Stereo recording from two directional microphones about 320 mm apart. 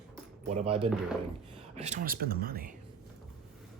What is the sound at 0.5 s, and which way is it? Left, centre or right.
Speech, centre.